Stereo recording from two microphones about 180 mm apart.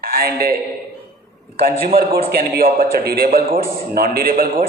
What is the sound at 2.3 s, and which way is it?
A man's voice, 55° right (ahead or behind).